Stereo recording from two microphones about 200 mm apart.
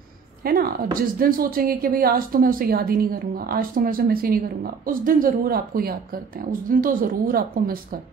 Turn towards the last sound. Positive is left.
turn(degrees=-45)  # may be behind; listen again after turning